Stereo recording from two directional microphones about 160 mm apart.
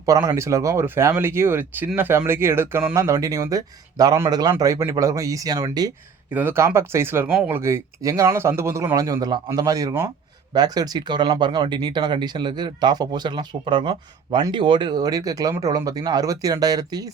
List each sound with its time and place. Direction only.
0.0 s speech: 20° right (ahead or behind)
6.3 s speech: 15° right (ahead or behind)